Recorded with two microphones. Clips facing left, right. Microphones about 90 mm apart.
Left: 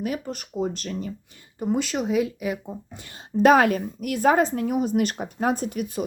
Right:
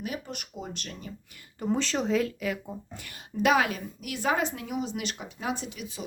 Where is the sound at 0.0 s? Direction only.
40° left (ahead or behind).